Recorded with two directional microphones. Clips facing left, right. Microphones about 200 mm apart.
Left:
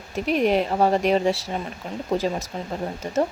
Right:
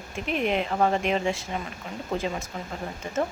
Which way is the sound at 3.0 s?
40° left (ahead or behind).